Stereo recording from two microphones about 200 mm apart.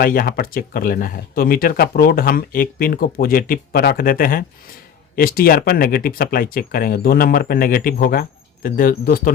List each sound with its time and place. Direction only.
0.0 s speech: 45° left (ahead or behind)